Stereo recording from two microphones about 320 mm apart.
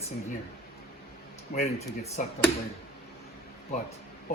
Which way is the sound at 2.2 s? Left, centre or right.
Left.